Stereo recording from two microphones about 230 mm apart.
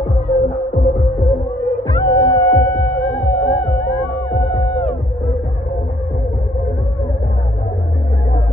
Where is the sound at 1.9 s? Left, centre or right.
Centre.